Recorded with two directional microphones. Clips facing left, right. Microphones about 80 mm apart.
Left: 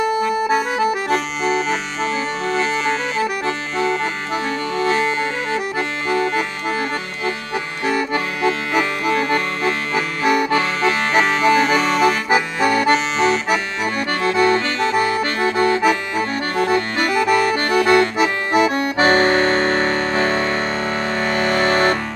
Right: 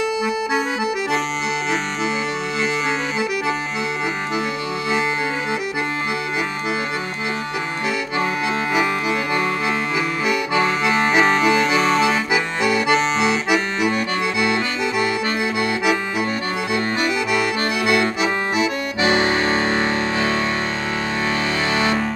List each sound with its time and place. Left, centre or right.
0.2 s accordion: centre
8.5 s music: centre
10.5 s accordion: centre
12.3 s accordion: left
12.9 s accordion: centre
14.3 s accordion: left
15.7 s accordion: centre
16.6 s accordion: left
19.5 s music: centre
21.4 s music: left